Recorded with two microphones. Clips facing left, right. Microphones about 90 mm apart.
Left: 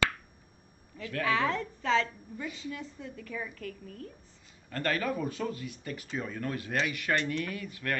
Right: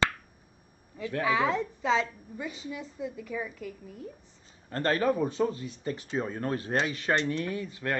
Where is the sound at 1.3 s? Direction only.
10° right (ahead or behind).